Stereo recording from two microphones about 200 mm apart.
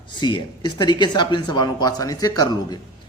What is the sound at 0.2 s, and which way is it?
A man's voice, 25° left (ahead or behind).